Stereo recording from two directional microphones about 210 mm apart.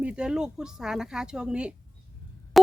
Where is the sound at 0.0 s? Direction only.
5° right (ahead or behind).